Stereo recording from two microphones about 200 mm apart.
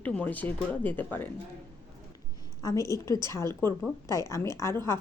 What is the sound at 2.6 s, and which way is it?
Speech, 15° left (ahead or behind).